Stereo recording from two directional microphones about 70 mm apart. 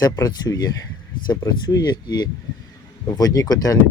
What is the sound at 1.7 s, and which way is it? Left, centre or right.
Speech, left.